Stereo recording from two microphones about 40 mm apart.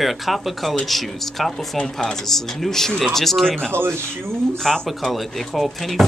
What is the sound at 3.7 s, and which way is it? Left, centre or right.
Speech, right.